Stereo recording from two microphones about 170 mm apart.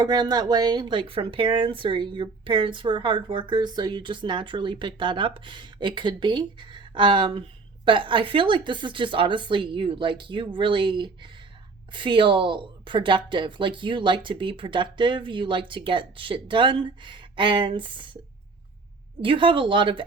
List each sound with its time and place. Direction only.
0.0 s speech: 25° right (ahead or behind)
19.2 s speech: 30° right (ahead or behind)